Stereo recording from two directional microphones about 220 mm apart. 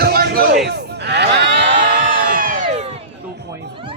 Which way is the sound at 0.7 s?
50° right (ahead or behind).